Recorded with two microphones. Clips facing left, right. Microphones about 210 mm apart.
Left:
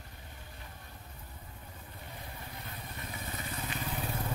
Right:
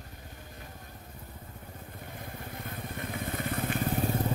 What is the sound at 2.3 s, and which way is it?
Vehicle, 50° right (ahead or behind).